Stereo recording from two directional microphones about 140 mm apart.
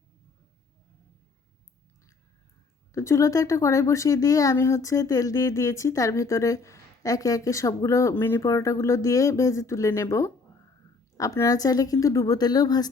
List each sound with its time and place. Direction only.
2.9 s speech: 20° left (ahead or behind)